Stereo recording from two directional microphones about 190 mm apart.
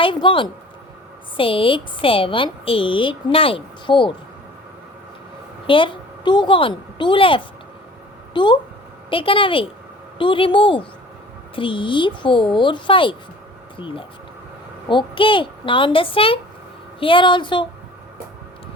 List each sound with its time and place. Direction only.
0.0 s speech: 25° left (ahead or behind)
5.6 s a woman's voice: 25° left (ahead or behind)